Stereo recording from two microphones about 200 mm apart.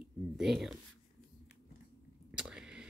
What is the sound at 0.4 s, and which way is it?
Speech, centre (ahead or behind).